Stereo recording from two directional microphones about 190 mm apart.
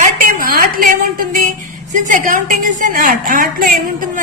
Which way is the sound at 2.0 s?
45° right (ahead or behind).